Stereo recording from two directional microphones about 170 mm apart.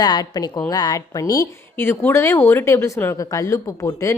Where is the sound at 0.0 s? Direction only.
25° left (ahead or behind).